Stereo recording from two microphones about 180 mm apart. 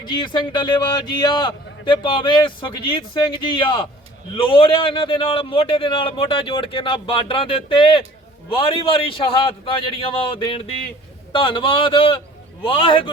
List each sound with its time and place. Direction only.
0.0 s a man's voice: 25° left (ahead or behind)